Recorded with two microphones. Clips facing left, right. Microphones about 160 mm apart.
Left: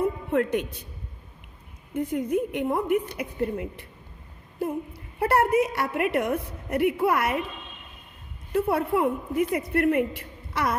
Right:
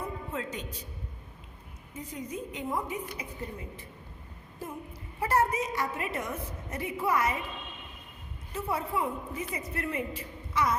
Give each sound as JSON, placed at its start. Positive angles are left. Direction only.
{"t": 0.3, "sound": "a woman's voice", "side_deg": 60}
{"t": 1.9, "sound": "a woman's voice", "side_deg": 60}
{"t": 5.2, "sound": "a woman's voice", "side_deg": 60}
{"t": 8.5, "sound": "a woman's voice", "side_deg": 60}